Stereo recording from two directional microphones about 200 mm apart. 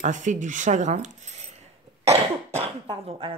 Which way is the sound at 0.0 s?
40° right (ahead or behind).